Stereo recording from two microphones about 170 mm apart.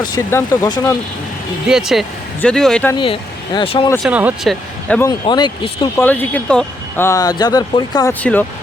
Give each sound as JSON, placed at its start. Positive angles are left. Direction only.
{"t": 0.3, "sound": "speech", "side_deg": 15}
{"t": 1.6, "sound": "speech", "side_deg": 0}
{"t": 3.0, "sound": "speech", "side_deg": 30}
{"t": 4.0, "sound": "speech", "side_deg": -10}
{"t": 4.9, "sound": "speech", "side_deg": 10}
{"t": 5.2, "sound": "speech", "side_deg": 25}
{"t": 6.0, "sound": "speech", "side_deg": 10}
{"t": 8.2, "sound": "speech", "side_deg": 10}